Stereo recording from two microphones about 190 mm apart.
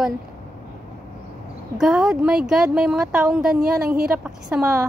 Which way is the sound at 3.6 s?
50° right (ahead or behind).